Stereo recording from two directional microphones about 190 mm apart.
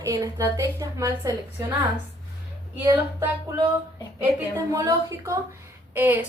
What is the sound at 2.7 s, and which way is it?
Speech, 15° right (ahead or behind).